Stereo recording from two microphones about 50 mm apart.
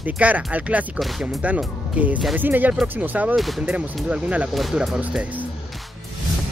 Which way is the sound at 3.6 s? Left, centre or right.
Right.